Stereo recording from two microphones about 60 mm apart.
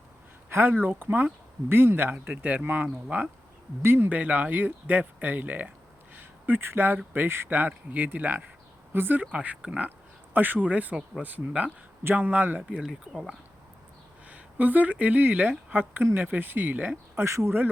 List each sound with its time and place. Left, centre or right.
0.5 s speech: right
4.1 s speech: right
9.3 s speech: right
12.8 s speech: centre
14.3 s speech: right
17.2 s speech: right